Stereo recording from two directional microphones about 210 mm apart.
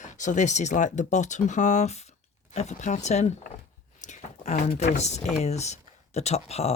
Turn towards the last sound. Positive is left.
turn(degrees=30)  # may be behind; listen again after turning